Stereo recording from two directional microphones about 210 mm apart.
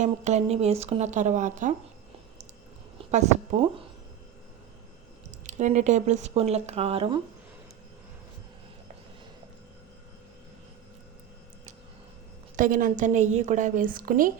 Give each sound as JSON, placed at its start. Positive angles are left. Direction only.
{"t": 0.0, "sound": "a woman's voice", "side_deg": -30}
{"t": 3.0, "sound": "speech", "side_deg": -35}
{"t": 5.5, "sound": "a woman's voice", "side_deg": -35}
{"t": 12.5, "sound": "a woman's voice", "side_deg": -40}